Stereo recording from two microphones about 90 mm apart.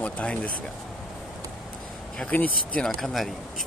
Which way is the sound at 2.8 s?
Centre (ahead or behind).